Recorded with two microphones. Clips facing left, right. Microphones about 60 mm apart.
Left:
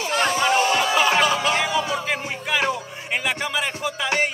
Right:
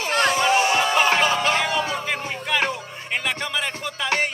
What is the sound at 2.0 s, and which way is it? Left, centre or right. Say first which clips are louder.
Music: left 1 dB; centre.